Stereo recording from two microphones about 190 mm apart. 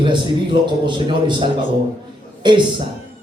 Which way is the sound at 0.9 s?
25° right (ahead or behind).